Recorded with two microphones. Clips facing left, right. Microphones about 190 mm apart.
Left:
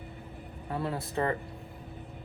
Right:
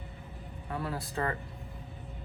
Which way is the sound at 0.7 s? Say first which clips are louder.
Left 3 dB; 25° left (ahead or behind).